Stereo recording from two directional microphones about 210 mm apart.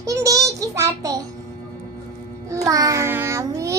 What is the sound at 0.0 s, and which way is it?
Child singing, 15° right (ahead or behind).